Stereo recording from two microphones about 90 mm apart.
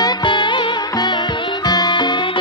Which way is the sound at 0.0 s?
60° left (ahead or behind).